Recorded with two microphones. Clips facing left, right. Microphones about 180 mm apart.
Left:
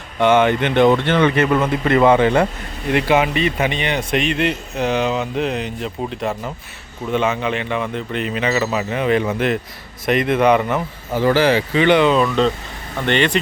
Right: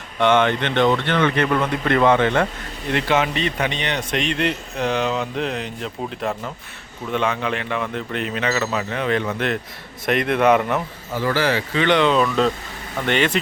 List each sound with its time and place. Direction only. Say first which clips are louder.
0.2 s speech: left 3 dB; 10° left (ahead or behind)
1.4 s a man's voice: left 3 dB; 5° left (ahead or behind)
11.1 s a man's voice: left 6 dB; 25° left (ahead or behind); by 13.4 s 5° right (ahead or behind)